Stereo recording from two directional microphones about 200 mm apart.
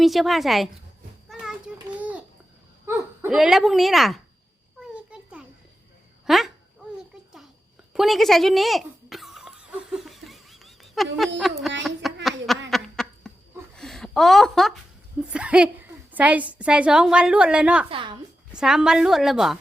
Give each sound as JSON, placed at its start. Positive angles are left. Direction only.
{"t": 0.0, "sound": "a woman's voice", "side_deg": 0}
{"t": 1.3, "sound": "a sound", "side_deg": -5}
{"t": 2.8, "sound": "speech", "side_deg": -10}
{"t": 4.8, "sound": "a sound", "side_deg": -5}
{"t": 6.2, "sound": "speech", "side_deg": 0}
{"t": 7.9, "sound": "a sound", "side_deg": 0}
{"t": 15.2, "sound": "a woman's voice", "side_deg": -5}
{"t": 17.8, "sound": "a woman's voice", "side_deg": -25}
{"t": 18.5, "sound": "a woman's voice", "side_deg": -5}